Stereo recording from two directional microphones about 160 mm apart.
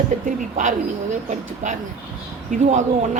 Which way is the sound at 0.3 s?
50° right (ahead or behind).